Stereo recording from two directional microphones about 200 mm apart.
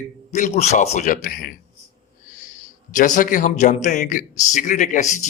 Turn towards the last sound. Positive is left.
turn(degrees=40)  # may be behind; listen again after turning